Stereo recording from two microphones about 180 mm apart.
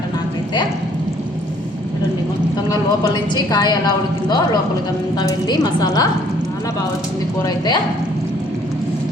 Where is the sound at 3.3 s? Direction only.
20° left (ahead or behind).